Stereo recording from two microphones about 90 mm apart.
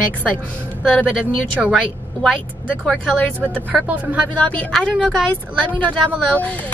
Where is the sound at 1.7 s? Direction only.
5° right (ahead or behind).